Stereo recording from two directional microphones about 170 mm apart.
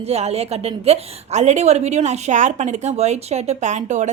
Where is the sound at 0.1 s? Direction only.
40° right (ahead or behind).